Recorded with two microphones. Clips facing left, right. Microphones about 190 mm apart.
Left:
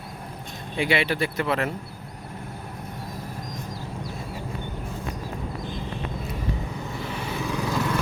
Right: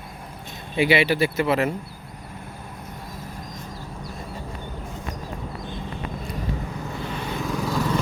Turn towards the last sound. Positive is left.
turn(degrees=-10)  # may be behind; listen again after turning